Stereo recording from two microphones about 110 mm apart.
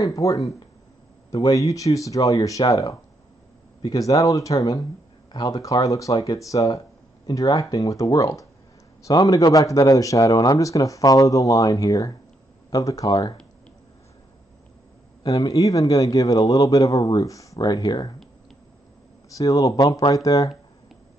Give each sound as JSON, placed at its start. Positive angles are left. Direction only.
{"t": 0.0, "sound": "speech", "side_deg": 30}
{"t": 15.2, "sound": "speech", "side_deg": 35}
{"t": 19.3, "sound": "speech", "side_deg": 30}